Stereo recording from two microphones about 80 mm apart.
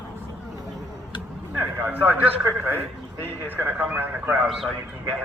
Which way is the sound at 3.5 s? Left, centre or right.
Right.